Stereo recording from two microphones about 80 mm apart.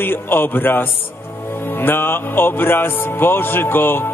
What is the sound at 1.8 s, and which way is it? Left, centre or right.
Speech, left.